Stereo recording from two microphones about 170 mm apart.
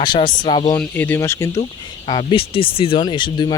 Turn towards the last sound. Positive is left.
turn(degrees=25)  # may be behind; listen again after turning